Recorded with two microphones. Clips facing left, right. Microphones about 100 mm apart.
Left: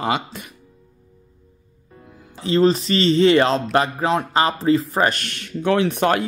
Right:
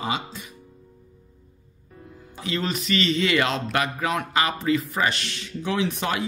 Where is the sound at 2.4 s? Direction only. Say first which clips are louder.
Left 10 dB; 35° left (ahead or behind).